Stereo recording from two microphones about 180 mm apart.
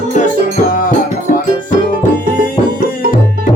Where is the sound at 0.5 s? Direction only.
50° left (ahead or behind).